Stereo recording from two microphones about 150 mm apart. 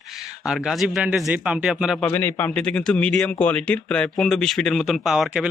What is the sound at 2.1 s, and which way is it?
A man's voice, 15° left (ahead or behind).